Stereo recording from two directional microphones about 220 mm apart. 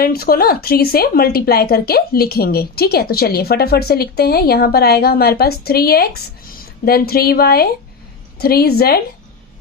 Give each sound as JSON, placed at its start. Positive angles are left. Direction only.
{"t": 0.0, "sound": "speech", "side_deg": 45}